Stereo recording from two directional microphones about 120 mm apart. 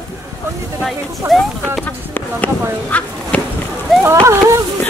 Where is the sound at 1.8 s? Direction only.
15° left (ahead or behind).